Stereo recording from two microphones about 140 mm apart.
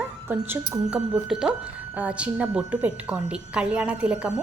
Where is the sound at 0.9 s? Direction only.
5° right (ahead or behind).